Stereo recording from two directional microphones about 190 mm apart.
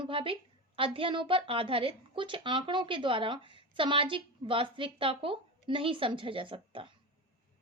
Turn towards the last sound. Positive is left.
turn(degrees=-25)  # may be behind; listen again after turning